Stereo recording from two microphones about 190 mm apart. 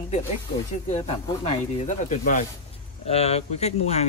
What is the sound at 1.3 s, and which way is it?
Speech, 30° left (ahead or behind).